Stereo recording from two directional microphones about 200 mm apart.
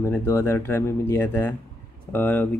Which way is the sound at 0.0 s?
10° left (ahead or behind).